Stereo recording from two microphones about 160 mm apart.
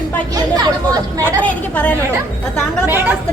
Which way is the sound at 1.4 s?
10° left (ahead or behind).